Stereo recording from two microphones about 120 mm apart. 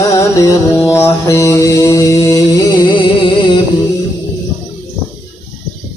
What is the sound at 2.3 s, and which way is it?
Music, 35° left (ahead or behind).